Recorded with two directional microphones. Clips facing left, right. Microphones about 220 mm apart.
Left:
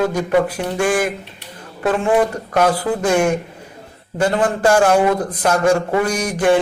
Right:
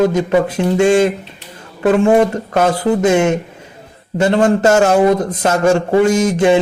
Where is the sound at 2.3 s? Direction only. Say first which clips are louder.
Right 2 dB; 25° right (ahead or behind).